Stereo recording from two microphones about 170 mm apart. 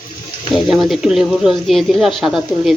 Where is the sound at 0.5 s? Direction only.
Centre (ahead or behind).